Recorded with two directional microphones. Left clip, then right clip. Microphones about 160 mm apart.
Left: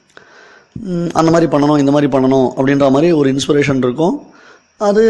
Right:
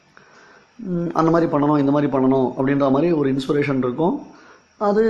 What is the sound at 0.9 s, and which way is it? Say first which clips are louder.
A man's voice: left 6 dB; 30° left (ahead or behind).